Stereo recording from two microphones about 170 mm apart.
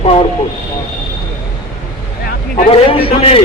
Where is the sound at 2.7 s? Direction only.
35° left (ahead or behind).